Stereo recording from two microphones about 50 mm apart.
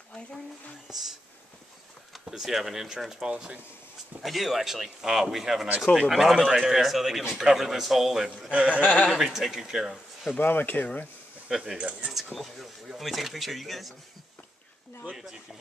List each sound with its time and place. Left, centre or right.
2.2 s speech: centre
4.2 s a man's voice: centre
8.5 s speech: right
9.0 s a man's voice: centre
10.4 s speech: left
11.4 s a man's voice: centre